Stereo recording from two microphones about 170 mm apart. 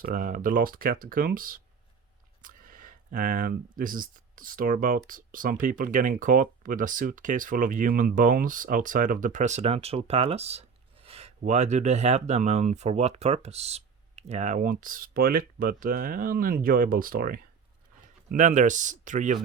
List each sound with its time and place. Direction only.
0.0 s speech: 50° right (ahead or behind)
18.3 s speech: 45° right (ahead or behind)